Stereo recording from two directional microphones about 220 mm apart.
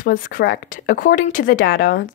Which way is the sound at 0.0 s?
40° left (ahead or behind).